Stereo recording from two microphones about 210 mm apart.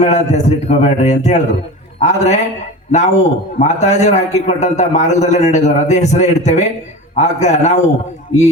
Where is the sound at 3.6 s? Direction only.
35° left (ahead or behind).